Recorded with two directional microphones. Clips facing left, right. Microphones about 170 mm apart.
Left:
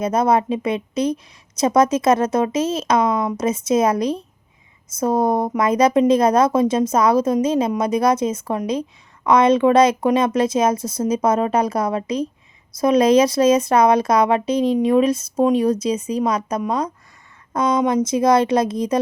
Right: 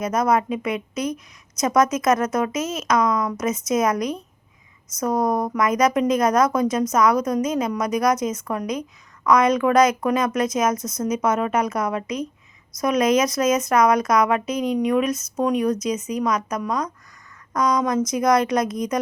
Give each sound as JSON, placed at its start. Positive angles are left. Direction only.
{"t": 0.0, "sound": "speech", "side_deg": 30}